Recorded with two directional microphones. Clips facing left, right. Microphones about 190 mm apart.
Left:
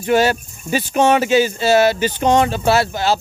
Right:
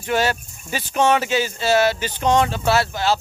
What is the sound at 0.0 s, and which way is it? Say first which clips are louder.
Speech: left 6 dB; 10° left (ahead or behind).